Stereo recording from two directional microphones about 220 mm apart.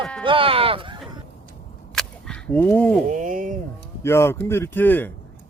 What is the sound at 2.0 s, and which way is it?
Whip, 5° left (ahead or behind).